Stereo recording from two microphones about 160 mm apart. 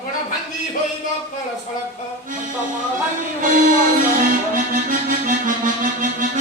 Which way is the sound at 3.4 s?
60° right (ahead or behind).